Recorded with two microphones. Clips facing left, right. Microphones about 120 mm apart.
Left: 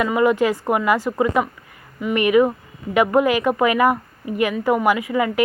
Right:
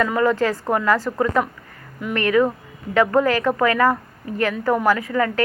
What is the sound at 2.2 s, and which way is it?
A woman's voice, 15° left (ahead or behind).